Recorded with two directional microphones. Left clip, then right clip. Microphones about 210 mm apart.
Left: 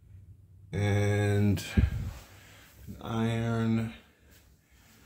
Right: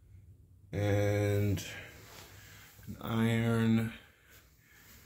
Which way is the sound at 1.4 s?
30° left (ahead or behind).